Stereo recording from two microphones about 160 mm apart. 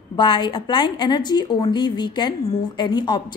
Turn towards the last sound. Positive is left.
turn(degrees=30)  # may be behind; listen again after turning